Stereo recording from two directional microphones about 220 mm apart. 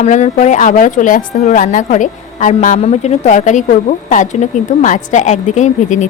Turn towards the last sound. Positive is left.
turn(degrees=30)  # may be behind; listen again after turning